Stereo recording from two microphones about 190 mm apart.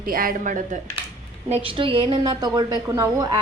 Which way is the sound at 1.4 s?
30° right (ahead or behind).